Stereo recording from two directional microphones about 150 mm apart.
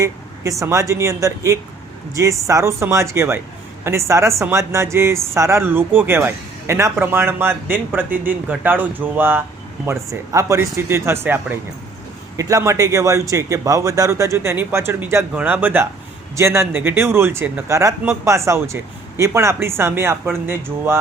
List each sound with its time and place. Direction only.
0.0 s speech: 20° right (ahead or behind)